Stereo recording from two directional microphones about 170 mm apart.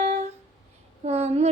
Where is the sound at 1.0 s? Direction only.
40° right (ahead or behind).